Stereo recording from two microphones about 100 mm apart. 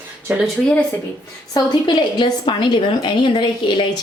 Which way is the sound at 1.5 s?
45° left (ahead or behind).